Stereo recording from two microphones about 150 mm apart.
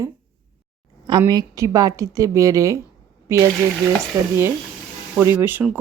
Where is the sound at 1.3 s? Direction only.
25° right (ahead or behind).